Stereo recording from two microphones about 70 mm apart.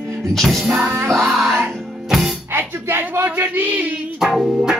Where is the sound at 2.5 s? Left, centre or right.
Right.